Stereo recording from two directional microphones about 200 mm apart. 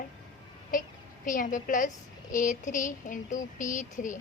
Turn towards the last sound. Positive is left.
turn(degrees=40)  # may be behind; listen again after turning